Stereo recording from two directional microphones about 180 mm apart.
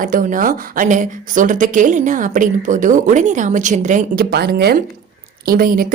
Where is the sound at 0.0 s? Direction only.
50° right (ahead or behind).